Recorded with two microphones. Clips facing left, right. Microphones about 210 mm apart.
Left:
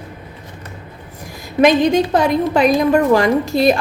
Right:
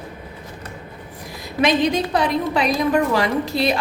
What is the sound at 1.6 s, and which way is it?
A woman's voice, 50° left (ahead or behind).